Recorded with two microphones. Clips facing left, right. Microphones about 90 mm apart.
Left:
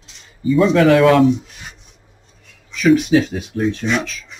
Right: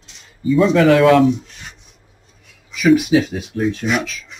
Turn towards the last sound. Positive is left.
turn(degrees=0)  # may be behind; listen again after turning